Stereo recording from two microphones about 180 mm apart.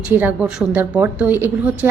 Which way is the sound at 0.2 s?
10° right (ahead or behind).